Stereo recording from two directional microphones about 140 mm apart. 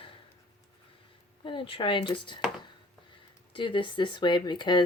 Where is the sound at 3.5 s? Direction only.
35° left (ahead or behind).